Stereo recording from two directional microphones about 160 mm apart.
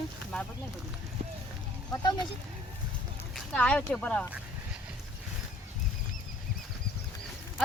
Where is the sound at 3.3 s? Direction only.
5° left (ahead or behind).